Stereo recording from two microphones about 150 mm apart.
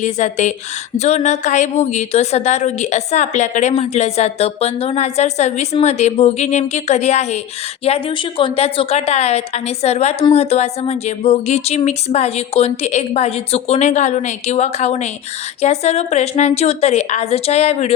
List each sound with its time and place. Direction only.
0.0 s a woman's voice: 50° left (ahead or behind)